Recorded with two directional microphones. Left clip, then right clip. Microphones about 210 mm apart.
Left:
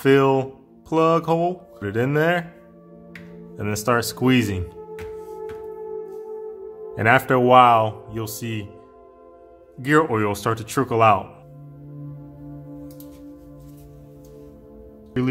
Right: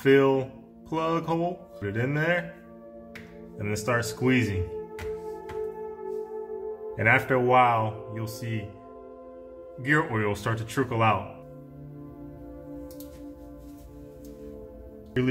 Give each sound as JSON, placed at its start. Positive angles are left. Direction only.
{"t": 0.0, "sound": "speech", "side_deg": 50}
{"t": 3.5, "sound": "speech", "side_deg": 50}
{"t": 7.0, "sound": "speech", "side_deg": 50}
{"t": 9.8, "sound": "speech", "side_deg": 50}